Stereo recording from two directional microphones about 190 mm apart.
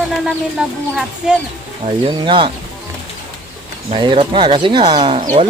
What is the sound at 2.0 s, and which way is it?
Speech, 30° right (ahead or behind).